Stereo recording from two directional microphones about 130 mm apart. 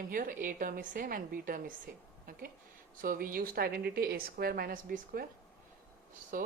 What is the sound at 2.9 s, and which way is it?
Speech, 90° right.